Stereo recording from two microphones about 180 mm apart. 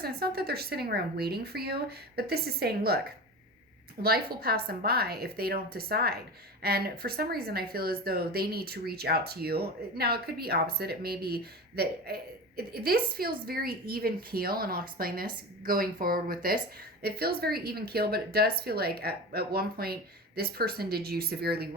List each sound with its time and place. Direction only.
0.0 s speech: 60° right (ahead or behind)
4.0 s speech: 60° right (ahead or behind)